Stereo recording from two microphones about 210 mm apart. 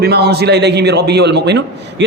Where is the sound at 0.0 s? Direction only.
50° right (ahead or behind).